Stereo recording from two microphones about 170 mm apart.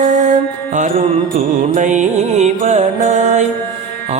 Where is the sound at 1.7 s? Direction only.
45° right (ahead or behind).